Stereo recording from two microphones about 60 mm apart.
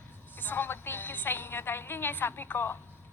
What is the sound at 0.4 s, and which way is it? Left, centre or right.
Speech, left.